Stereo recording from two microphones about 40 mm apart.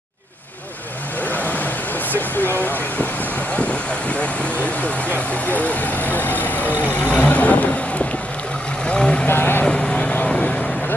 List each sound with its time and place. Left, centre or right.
1.3 s vehicle: left
3.5 s vehicle: left
5.3 s vehicle: left
8.8 s vehicle: left
9.3 s vehicle: left